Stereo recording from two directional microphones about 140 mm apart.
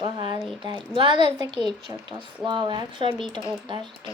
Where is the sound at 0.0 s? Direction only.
30° right (ahead or behind).